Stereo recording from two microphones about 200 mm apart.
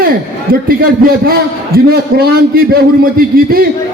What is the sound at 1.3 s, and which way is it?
A man's voice, 50° right (ahead or behind).